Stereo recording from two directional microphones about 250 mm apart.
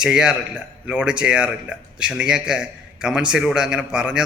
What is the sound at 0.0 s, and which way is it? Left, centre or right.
A man's voice, centre.